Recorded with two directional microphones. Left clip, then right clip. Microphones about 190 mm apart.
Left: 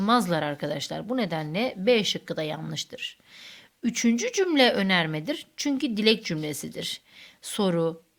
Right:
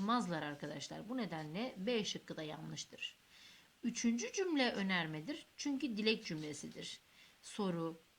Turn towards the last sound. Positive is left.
turn(degrees=35)  # may be behind; listen again after turning